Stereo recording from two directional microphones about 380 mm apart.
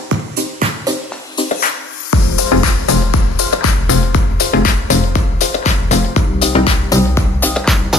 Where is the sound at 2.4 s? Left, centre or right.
Left.